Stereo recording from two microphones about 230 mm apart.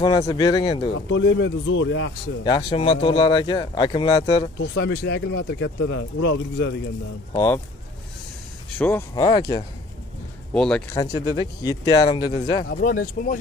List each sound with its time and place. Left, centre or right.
0.3 s speech: centre
1.0 s speech: left
2.4 s speech: left
4.6 s speech: left
7.3 s speech: centre
8.7 s speech: centre
10.5 s speech: centre
11.0 s speech: centre
12.7 s speech: left